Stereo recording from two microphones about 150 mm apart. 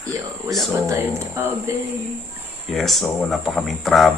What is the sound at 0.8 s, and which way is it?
Speech, 20° right (ahead or behind).